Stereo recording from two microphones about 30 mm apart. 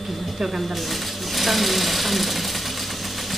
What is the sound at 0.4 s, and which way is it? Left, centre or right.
Stir, centre.